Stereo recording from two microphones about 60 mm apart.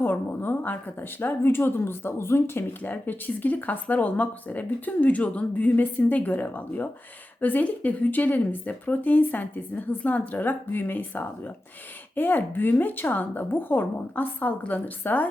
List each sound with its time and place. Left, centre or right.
0.0 s a woman's voice: left
2.9 s a woman's voice: left